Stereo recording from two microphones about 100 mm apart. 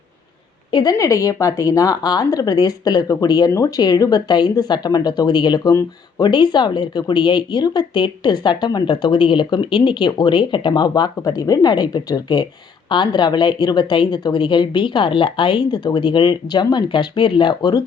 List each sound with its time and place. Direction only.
0.7 s a woman's voice: 45° left (ahead or behind)
0.9 s speech: 35° left (ahead or behind)